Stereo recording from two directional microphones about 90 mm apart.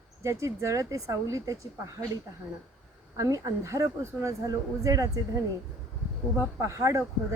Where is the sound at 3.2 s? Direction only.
40° right (ahead or behind).